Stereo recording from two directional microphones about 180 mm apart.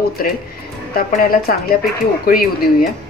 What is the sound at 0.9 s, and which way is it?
A woman's voice, 55° left (ahead or behind).